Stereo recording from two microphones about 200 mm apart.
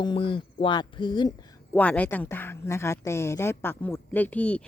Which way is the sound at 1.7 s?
10° left (ahead or behind).